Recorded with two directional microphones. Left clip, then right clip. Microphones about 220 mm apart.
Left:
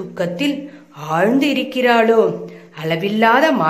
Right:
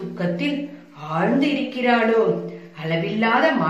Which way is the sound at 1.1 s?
50° left (ahead or behind).